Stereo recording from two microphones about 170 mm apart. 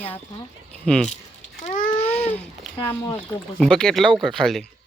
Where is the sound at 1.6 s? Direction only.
50° left (ahead or behind).